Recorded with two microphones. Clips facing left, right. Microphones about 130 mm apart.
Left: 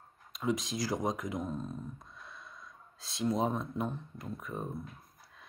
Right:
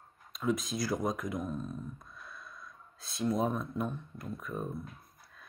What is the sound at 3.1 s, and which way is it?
Speech, 20° left (ahead or behind).